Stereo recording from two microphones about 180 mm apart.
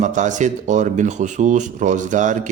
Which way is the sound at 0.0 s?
45° right (ahead or behind).